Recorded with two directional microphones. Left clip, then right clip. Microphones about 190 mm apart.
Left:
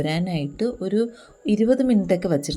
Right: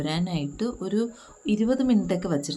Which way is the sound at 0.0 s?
15° left (ahead or behind).